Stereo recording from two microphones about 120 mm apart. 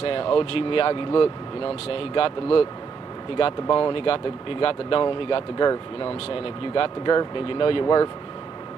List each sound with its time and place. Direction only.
0.0 s speech: 45° left (ahead or behind)
7.8 s speech: 30° left (ahead or behind)